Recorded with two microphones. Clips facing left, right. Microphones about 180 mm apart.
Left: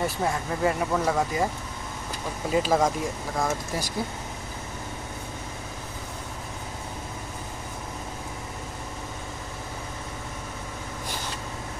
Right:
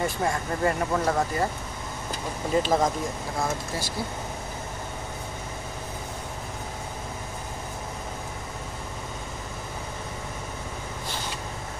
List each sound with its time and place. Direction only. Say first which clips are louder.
0.0 s speech: even; 5° left (ahead or behind)
2.5 s speech: even; 5° left (ahead or behind)